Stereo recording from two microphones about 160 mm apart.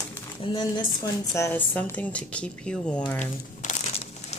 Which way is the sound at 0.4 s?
30° left (ahead or behind).